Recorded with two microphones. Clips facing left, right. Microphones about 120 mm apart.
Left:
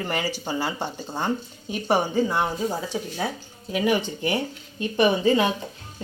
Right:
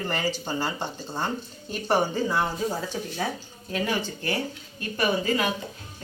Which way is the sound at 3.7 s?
15° left (ahead or behind).